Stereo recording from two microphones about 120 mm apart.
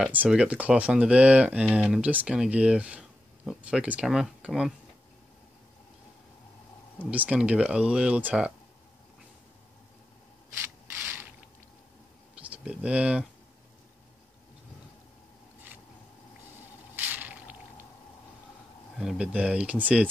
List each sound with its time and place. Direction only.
0.0 s speech: 10° right (ahead or behind)
7.0 s speech: 10° right (ahead or behind)
10.5 s rub: 15° right (ahead or behind)
12.4 s speech: 10° right (ahead or behind)
16.9 s squish: 15° right (ahead or behind)
18.9 s speech: 5° right (ahead or behind)